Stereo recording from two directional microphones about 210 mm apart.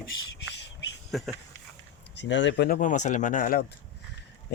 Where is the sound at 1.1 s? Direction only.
Centre (ahead or behind).